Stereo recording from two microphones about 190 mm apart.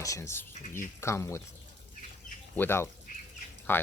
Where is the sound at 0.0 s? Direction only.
15° left (ahead or behind).